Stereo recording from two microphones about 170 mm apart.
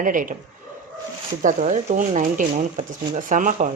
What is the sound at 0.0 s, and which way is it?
Speech, 50° right (ahead or behind).